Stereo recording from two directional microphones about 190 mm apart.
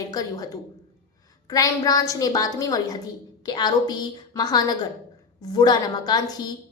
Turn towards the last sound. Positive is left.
turn(degrees=20)  # may be behind; listen again after turning